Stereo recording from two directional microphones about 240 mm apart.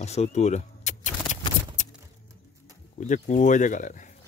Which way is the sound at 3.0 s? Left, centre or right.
Left.